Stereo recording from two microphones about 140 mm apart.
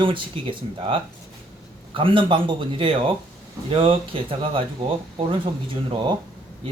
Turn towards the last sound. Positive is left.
turn(degrees=-35)  # may be behind; listen again after turning